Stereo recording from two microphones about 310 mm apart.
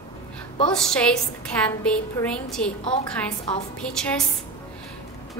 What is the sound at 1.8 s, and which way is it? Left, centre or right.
Speech, centre.